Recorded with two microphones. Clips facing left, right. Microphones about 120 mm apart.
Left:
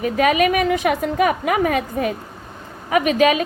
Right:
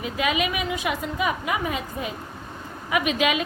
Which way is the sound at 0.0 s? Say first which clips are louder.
Left 8 dB; 50° left (ahead or behind).